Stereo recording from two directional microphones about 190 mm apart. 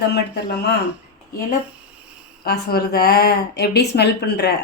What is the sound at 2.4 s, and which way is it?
Speech, 55° left (ahead or behind).